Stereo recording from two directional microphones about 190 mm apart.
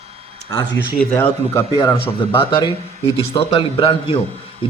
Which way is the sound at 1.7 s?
25° left (ahead or behind).